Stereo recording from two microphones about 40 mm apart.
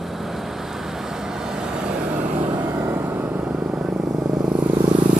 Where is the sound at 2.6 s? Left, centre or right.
Right.